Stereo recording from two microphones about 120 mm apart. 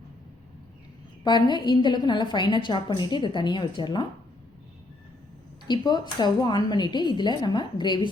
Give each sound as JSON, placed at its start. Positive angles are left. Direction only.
{"t": 1.2, "sound": "a woman's voice", "side_deg": 40}
{"t": 5.6, "sound": "a woman's voice", "side_deg": 35}